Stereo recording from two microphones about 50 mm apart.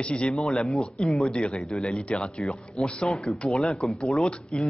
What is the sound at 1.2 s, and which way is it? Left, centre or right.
A man's voice, centre.